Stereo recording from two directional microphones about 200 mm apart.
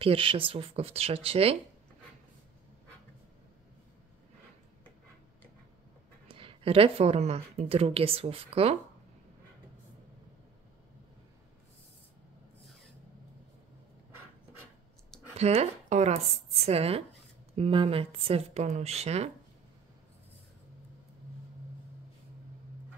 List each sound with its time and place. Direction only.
0.0 s speech: 25° right (ahead or behind)
6.2 s speech: 25° right (ahead or behind)
15.3 s speech: 30° right (ahead or behind)